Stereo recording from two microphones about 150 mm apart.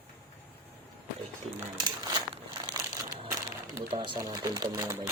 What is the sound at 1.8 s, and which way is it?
Crumpling, 25° right (ahead or behind).